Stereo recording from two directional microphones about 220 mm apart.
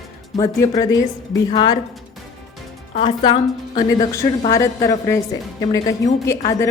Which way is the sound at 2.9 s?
25° left (ahead or behind).